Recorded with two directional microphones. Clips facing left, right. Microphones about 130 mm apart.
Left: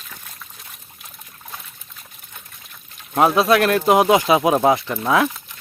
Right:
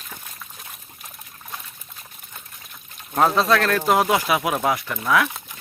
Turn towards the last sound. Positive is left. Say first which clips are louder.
# left 3 dB
turn(degrees=30)  # may be behind; listen again after turning